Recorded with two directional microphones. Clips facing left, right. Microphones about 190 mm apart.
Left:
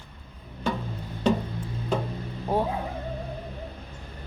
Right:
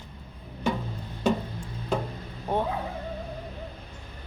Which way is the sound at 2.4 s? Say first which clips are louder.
Left 2 dB; 5° left (ahead or behind).